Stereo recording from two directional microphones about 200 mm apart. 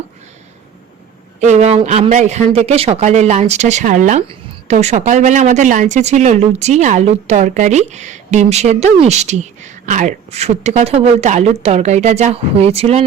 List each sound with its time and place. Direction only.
1.4 s a woman's voice: 35° right (ahead or behind)